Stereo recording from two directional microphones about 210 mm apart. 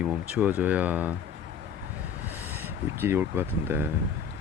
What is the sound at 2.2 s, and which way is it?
Speech, 10° right (ahead or behind).